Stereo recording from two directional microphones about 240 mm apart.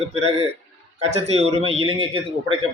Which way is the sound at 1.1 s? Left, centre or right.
Right.